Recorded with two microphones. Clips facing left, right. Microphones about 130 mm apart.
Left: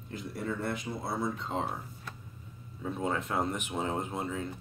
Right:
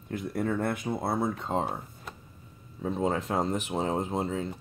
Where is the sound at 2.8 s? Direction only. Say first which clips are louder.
Right 4 dB; 30° right (ahead or behind).